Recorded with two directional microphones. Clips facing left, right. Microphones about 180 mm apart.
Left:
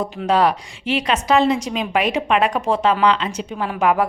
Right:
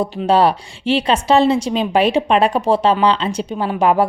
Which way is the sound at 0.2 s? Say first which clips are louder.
Right 3 dB; 30° right (ahead or behind).